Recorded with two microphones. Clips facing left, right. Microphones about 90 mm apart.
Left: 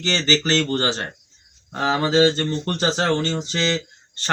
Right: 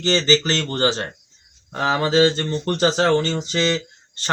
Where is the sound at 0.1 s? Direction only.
20° right (ahead or behind).